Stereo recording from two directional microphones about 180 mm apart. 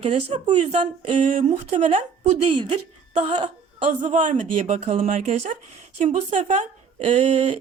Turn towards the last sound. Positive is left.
turn(degrees=-35)  # may be behind; listen again after turning